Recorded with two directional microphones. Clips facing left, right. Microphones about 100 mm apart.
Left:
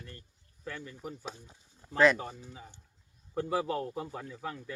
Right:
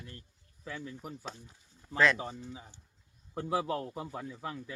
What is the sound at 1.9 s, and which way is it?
Speech, 15° left (ahead or behind).